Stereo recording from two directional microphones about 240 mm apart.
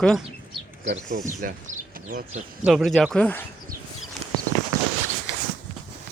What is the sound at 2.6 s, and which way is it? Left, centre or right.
Speech, centre.